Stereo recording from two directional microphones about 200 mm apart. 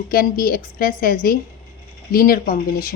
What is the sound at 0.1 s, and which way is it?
A woman's voice, 45° left (ahead or behind).